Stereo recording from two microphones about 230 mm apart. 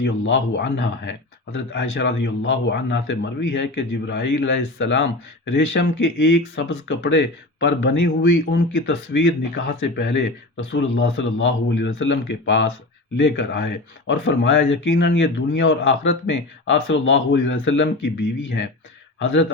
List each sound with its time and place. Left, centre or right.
0.0 s speech: left